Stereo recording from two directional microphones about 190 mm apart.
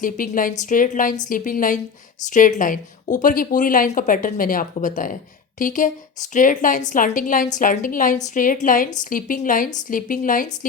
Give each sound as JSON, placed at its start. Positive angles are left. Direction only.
{"t": 0.0, "sound": "a woman's voice", "side_deg": 45}